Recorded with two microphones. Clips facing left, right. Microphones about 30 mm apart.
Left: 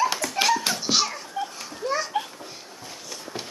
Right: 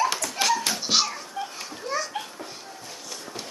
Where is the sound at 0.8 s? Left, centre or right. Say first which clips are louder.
Even; centre.